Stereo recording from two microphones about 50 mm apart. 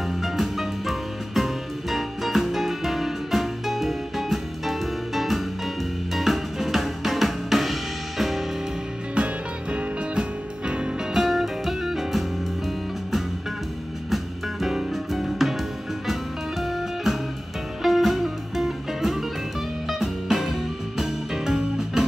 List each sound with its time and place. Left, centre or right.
0.2 s music: centre
6.1 s drum kit: centre
9.1 s music: right
11.1 s music: centre
14.1 s music: centre